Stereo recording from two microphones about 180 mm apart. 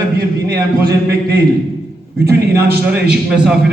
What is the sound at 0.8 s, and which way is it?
Speech, 60° right (ahead or behind).